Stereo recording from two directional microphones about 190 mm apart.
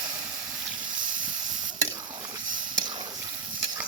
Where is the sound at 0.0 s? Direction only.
25° right (ahead or behind).